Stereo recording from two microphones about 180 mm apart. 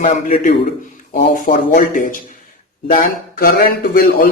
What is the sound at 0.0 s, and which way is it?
Speech, 45° left (ahead or behind).